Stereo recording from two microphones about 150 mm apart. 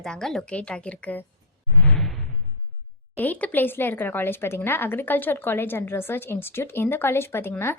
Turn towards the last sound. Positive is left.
turn(degrees=15)  # may be behind; listen again after turning